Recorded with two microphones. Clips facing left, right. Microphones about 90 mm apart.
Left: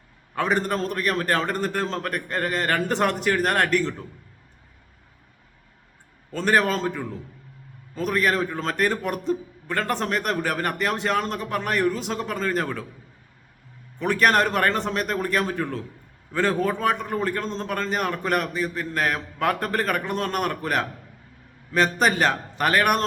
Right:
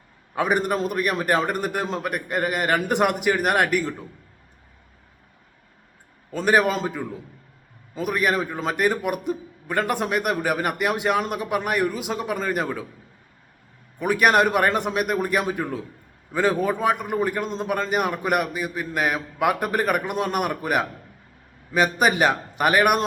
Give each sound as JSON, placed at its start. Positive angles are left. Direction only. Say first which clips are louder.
{"t": 0.3, "sound": "a man's voice", "louder": "right 1 dB", "side_deg": -15}
{"t": 6.3, "sound": "a man's voice", "louder": "right 2 dB", "side_deg": -10}
{"t": 14.0, "sound": "a man's voice", "louder": "right 2 dB", "side_deg": -10}